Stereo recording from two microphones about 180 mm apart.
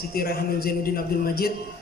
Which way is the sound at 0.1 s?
60° left (ahead or behind).